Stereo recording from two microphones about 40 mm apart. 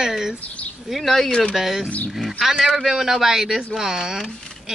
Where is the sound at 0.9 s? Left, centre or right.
Centre.